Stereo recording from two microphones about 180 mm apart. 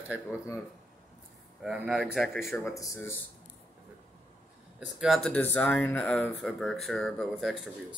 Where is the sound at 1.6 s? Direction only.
5° right (ahead or behind).